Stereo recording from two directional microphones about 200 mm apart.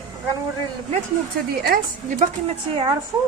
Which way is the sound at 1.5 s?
50° right (ahead or behind).